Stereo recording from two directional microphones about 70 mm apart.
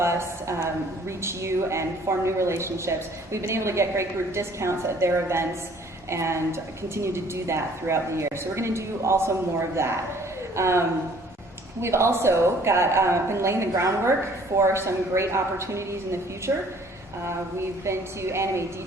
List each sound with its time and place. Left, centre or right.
0.0 s a woman's voice: right
17.8 s a woman's voice: right